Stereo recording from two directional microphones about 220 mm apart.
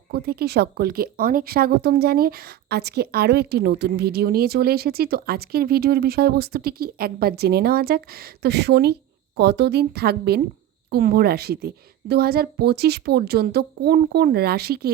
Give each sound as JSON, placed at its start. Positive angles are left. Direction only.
{"t": 0.1, "sound": "speech", "side_deg": -45}